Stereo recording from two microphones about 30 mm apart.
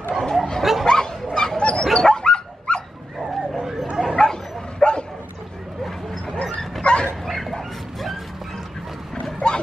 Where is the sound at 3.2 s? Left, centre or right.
Centre.